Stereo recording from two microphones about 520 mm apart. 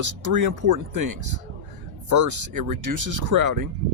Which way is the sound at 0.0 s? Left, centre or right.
Right.